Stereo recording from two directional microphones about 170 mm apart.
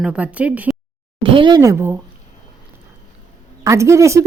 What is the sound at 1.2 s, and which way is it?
Speech, 30° right (ahead or behind).